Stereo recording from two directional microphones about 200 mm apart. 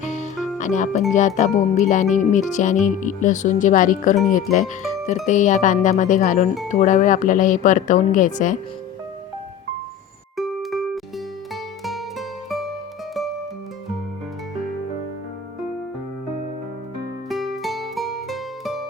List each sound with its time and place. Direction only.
0.0 s music: 35° left (ahead or behind)
0.6 s speech: 40° left (ahead or behind)
5.2 s speech: 40° left (ahead or behind)
10.3 s music: centre (ahead or behind)
12.5 s music: centre (ahead or behind)
17.2 s music: centre (ahead or behind)